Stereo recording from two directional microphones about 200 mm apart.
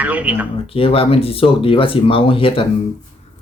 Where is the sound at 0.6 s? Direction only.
30° left (ahead or behind).